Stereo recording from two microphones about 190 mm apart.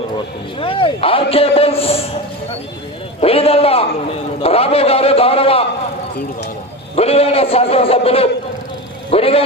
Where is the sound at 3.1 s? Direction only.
30° left (ahead or behind).